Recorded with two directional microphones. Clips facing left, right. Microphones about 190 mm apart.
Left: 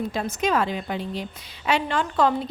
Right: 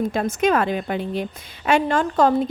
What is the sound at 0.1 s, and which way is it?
A woman's voice, 55° right (ahead or behind).